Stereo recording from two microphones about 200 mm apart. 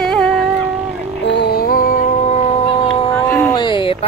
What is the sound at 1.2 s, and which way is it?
Music, 50° left (ahead or behind).